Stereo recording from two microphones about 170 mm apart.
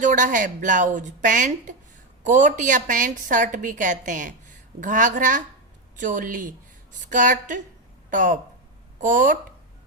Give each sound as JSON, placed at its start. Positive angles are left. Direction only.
{"t": 0.0, "sound": "a woman's voice", "side_deg": -50}